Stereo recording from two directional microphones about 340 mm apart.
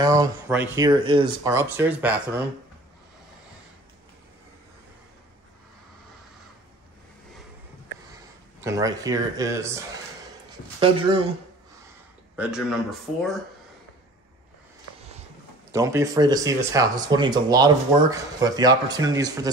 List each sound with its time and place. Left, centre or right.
0.0 s speech: centre
8.5 s speech: centre
10.8 s speech: centre
12.4 s speech: centre
15.7 s speech: centre